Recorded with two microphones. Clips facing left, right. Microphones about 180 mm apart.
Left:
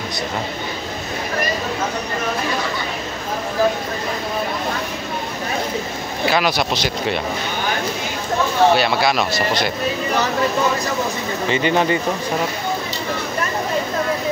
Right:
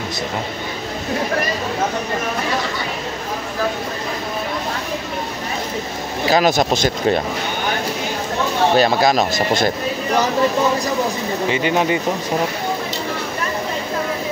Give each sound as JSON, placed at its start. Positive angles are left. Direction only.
{"t": 6.2, "sound": "speech", "side_deg": -40}
{"t": 8.7, "sound": "speech", "side_deg": -40}
{"t": 11.4, "sound": "speech", "side_deg": -10}